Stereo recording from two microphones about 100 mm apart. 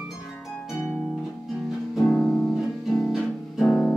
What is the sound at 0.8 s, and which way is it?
Harp, 20° left (ahead or behind).